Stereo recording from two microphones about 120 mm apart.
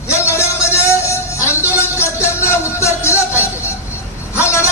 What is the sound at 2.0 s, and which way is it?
Music, 20° left (ahead or behind).